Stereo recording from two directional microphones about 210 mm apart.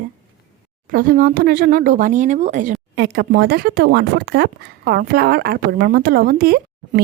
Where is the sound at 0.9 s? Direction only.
40° right (ahead or behind).